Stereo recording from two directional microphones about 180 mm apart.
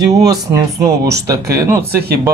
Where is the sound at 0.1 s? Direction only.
20° right (ahead or behind).